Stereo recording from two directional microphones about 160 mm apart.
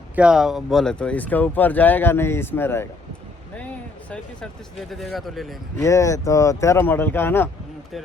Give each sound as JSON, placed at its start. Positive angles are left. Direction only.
{"t": 0.2, "sound": "speech", "side_deg": -5}
{"t": 4.1, "sound": "speech", "side_deg": 5}
{"t": 5.8, "sound": "speech", "side_deg": 20}